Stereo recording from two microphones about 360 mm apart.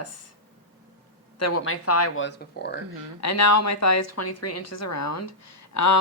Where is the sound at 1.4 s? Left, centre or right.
Left.